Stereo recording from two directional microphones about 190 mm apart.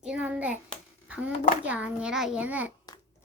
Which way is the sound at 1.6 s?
5° right (ahead or behind).